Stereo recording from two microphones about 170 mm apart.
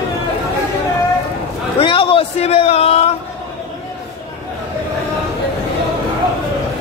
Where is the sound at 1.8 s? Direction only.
30° left (ahead or behind).